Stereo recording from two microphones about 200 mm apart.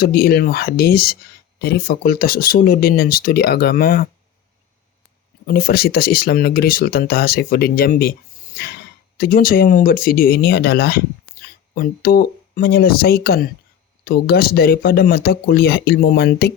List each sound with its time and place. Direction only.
0.0 s speech: 50° left (ahead or behind)
5.5 s speech: 50° left (ahead or behind)